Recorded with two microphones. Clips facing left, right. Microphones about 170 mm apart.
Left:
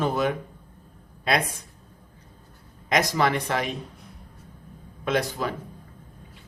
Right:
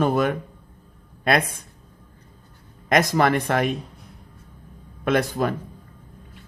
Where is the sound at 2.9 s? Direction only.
55° right (ahead or behind).